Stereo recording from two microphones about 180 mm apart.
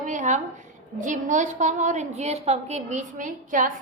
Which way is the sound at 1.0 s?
45° right (ahead or behind).